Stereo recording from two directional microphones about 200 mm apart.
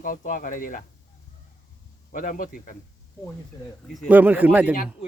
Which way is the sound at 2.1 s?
40° left (ahead or behind).